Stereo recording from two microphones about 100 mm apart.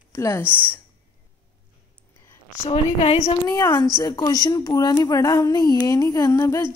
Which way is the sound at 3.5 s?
45° left (ahead or behind).